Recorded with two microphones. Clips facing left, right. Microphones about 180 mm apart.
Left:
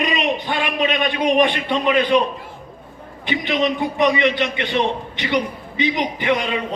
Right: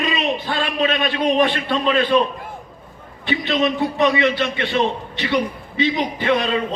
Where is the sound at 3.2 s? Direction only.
15° left (ahead or behind).